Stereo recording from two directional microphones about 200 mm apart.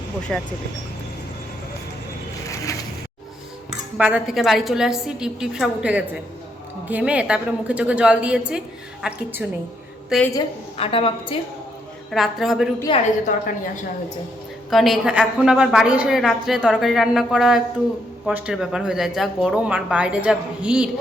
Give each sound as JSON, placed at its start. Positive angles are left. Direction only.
{"t": 0.2, "sound": "a woman's voice", "side_deg": 5}
{"t": 3.9, "sound": "a woman's voice", "side_deg": -5}
{"t": 10.1, "sound": "a woman's voice", "side_deg": 5}
{"t": 10.8, "sound": "a woman's voice", "side_deg": 25}
{"t": 12.1, "sound": "a woman's voice", "side_deg": 0}
{"t": 12.9, "sound": "a woman's voice", "side_deg": 25}
{"t": 14.7, "sound": "a woman's voice", "side_deg": 0}